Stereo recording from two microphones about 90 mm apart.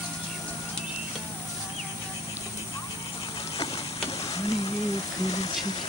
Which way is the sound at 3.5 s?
90° left.